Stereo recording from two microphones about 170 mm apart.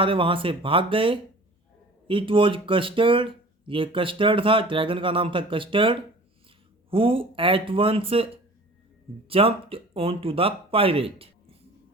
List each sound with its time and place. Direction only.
0.0 s speech: 30° right (ahead or behind)